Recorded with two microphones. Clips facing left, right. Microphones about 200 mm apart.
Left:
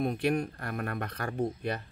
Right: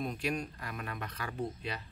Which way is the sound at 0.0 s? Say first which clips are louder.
Left 7 dB; 55° left (ahead or behind).